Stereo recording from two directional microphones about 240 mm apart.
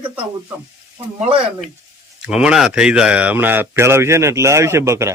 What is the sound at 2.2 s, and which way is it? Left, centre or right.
Speech, centre.